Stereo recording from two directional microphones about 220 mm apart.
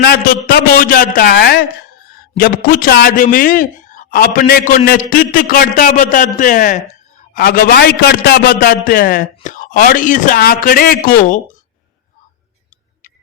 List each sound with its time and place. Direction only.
0.0 s a man's voice: 45° left (ahead or behind)